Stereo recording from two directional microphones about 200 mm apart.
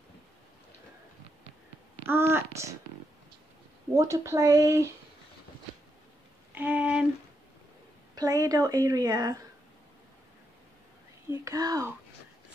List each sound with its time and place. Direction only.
2.0 s speech: 10° right (ahead or behind)
3.9 s speech: 15° right (ahead or behind)
6.5 s music: 10° right (ahead or behind)
8.1 s a woman's voice: 15° right (ahead or behind)
11.2 s speech: 15° right (ahead or behind)